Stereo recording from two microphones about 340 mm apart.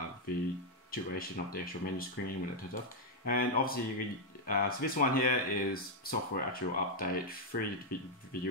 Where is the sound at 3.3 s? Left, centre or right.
Left.